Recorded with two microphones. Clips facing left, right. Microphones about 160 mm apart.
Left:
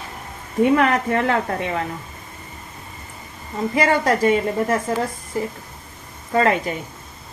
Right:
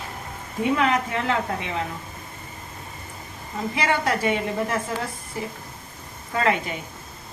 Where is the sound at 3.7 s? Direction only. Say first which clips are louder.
Left 6 dB; 45° left (ahead or behind).